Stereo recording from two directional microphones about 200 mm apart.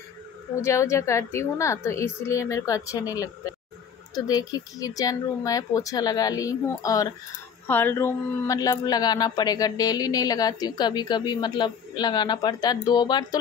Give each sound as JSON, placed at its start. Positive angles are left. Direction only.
{"t": 0.6, "sound": "a woman's voice", "side_deg": 15}